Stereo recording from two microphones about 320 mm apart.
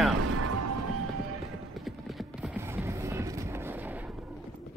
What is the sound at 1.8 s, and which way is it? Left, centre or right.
Clip-clop, centre.